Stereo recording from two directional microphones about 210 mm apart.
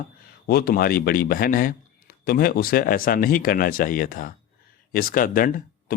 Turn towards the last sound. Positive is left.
turn(degrees=40)  # may be behind; listen again after turning